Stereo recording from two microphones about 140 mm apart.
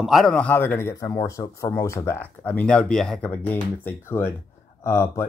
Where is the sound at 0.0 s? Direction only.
Centre (ahead or behind).